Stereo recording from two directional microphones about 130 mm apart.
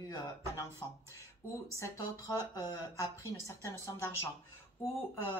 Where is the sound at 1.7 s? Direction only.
25° left (ahead or behind).